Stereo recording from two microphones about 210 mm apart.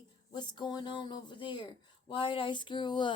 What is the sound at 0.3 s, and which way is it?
A woman's voice, 20° left (ahead or behind).